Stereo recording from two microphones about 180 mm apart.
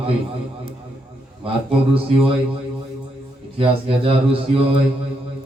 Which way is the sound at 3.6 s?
30° right (ahead or behind).